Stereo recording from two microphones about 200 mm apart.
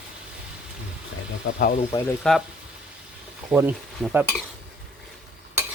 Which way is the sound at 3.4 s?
10° right (ahead or behind).